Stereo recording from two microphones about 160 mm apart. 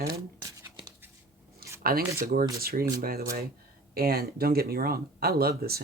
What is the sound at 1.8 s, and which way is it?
Speech, 65° right (ahead or behind).